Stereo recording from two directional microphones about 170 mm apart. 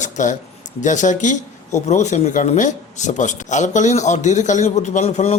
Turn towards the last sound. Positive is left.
turn(degrees=40)  # may be behind; listen again after turning